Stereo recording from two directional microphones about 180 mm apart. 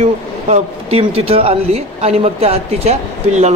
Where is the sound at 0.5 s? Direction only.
35° right (ahead or behind).